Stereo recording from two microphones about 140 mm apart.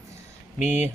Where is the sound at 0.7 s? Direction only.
15° right (ahead or behind).